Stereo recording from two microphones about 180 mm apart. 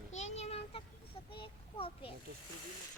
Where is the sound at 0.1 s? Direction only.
40° left (ahead or behind).